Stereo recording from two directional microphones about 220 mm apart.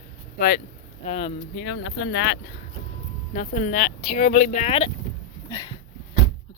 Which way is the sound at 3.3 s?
35° left (ahead or behind).